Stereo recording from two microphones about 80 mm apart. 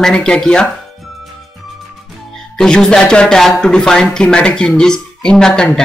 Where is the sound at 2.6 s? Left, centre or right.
Centre.